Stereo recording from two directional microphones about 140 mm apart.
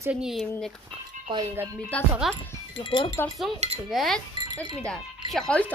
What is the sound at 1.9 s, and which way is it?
Speech, 10° left (ahead or behind).